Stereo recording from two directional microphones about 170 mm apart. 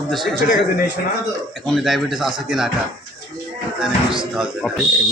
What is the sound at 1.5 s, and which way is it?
A man's voice, centre (ahead or behind).